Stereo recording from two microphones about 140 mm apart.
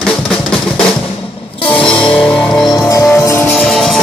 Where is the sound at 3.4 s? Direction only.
5° left (ahead or behind).